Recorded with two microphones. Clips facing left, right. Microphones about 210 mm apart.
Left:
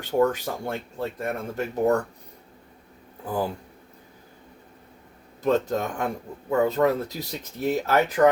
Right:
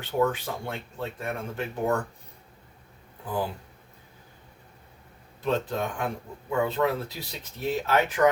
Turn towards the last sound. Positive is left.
turn(degrees=40)  # may be behind; listen again after turning